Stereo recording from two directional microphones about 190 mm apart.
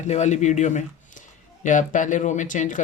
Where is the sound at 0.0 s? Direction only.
40° left (ahead or behind).